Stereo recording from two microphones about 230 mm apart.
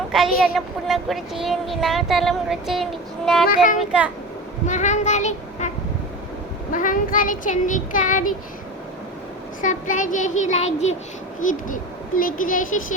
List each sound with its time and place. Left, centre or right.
0.1 s speech: centre
3.5 s speech: left
3.8 s speech: centre
4.6 s speech: left
6.7 s speech: left
9.6 s speech: left